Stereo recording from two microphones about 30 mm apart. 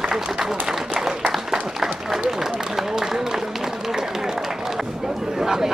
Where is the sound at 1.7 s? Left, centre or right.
Centre.